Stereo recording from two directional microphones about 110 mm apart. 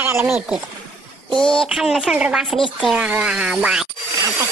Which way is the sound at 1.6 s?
5° right (ahead or behind).